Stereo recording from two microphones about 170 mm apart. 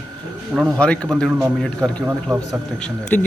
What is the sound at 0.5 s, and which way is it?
Speech, 5° right (ahead or behind).